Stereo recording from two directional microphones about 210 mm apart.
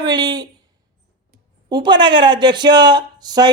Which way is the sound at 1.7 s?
20° right (ahead or behind).